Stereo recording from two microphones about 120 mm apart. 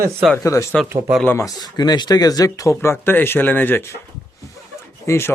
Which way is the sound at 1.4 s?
35° left (ahead or behind).